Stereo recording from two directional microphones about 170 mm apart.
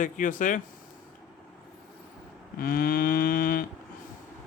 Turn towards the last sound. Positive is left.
turn(degrees=60)  # may be behind; listen again after turning